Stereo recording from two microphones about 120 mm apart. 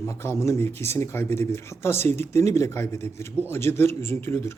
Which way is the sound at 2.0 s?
65° right (ahead or behind).